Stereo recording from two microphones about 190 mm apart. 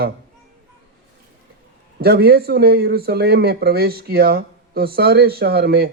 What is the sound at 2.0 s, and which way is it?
Speech, 55° right (ahead or behind).